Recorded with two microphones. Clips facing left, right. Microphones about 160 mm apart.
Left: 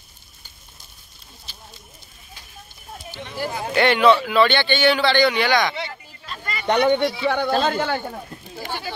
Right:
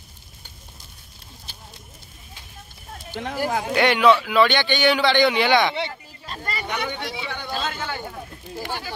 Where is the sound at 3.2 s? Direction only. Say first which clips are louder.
Right 9 dB; 90° right.